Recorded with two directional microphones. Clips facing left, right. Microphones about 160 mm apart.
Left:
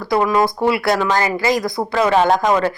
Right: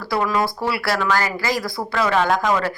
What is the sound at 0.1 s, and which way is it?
A woman's voice, 20° left (ahead or behind).